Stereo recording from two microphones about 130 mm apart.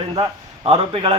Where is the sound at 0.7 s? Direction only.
45° right (ahead or behind).